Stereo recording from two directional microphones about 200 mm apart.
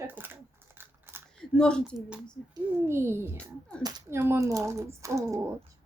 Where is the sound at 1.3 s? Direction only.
5° left (ahead or behind).